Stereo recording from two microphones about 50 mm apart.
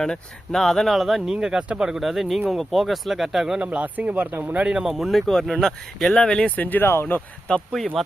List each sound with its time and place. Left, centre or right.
0.0 s speech: centre
0.9 s speech: centre
1.2 s speech: centre
1.9 s speech: centre
3.6 s speech: right
4.8 s speech: centre
5.2 s speech: centre
6.1 s speech: left
6.6 s speech: left
6.8 s speech: left
7.8 s speech: centre